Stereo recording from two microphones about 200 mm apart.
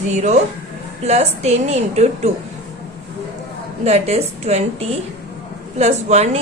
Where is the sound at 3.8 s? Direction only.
30° right (ahead or behind).